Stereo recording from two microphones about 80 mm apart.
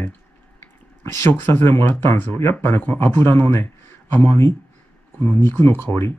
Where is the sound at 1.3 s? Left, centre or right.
Left.